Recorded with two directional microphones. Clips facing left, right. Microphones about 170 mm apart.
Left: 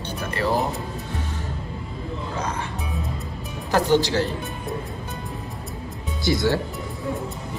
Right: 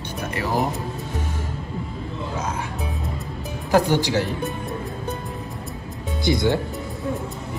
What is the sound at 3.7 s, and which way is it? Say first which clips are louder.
Speech: right 1 dB; 15° right (ahead or behind).